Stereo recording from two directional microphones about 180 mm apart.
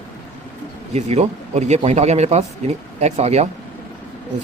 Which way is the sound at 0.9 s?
35° right (ahead or behind).